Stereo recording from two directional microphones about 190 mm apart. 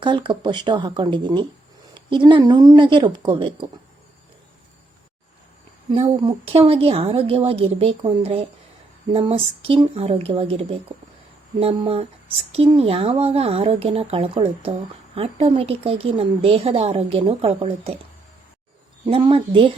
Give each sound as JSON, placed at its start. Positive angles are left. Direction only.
{"t": 0.0, "sound": "speech", "side_deg": -25}
{"t": 6.0, "sound": "speech", "side_deg": -30}
{"t": 19.0, "sound": "speech", "side_deg": -30}